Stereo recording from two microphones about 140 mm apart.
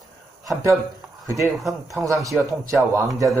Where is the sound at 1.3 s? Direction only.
20° right (ahead or behind).